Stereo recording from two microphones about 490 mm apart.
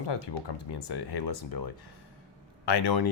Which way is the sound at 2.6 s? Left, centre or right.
Left.